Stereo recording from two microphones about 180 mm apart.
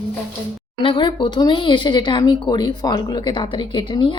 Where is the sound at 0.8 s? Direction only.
25° left (ahead or behind).